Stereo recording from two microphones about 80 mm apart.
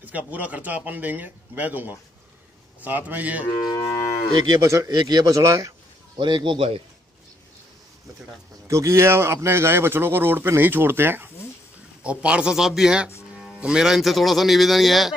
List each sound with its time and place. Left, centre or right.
0.0 s speech: centre
3.6 s moo: left
4.6 s a man's voice: right
6.1 s a man's voice: right
8.6 s speech: right
12.0 s a man's voice: centre